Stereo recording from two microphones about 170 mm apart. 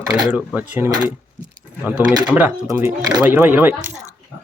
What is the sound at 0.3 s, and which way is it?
Speech, 10° right (ahead or behind).